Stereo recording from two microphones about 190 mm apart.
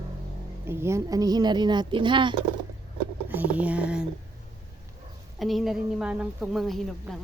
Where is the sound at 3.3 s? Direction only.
10° right (ahead or behind).